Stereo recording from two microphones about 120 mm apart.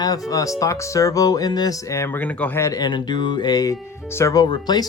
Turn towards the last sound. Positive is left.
turn(degrees=35)  # may be behind; listen again after turning